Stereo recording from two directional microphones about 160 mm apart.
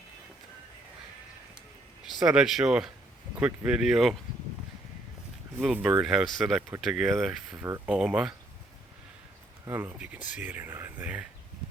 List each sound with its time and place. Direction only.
2.2 s speech: 5° right (ahead or behind)
5.6 s speech: 10° right (ahead or behind)
6.6 s speech: 15° right (ahead or behind)
6.8 s speech: centre (ahead or behind)
9.6 s speech: 10° right (ahead or behind)